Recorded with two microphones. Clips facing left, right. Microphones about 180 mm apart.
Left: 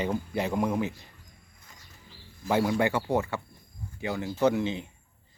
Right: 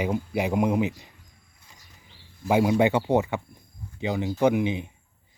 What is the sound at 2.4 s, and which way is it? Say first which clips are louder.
Speech: right 4 dB; 15° right (ahead or behind).